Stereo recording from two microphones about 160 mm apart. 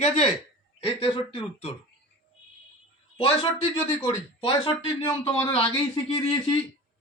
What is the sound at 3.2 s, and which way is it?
A man's voice, 35° left (ahead or behind).